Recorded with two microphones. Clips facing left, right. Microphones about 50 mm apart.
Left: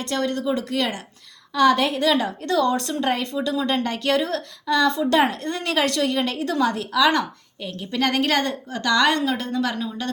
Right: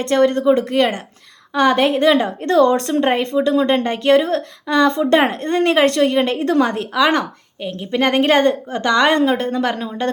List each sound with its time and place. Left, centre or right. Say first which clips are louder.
0.0 s speech: right 10 dB; right
2.4 s speech: right 7 dB; right